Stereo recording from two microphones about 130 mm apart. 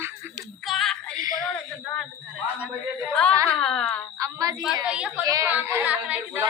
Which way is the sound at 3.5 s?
5° left (ahead or behind).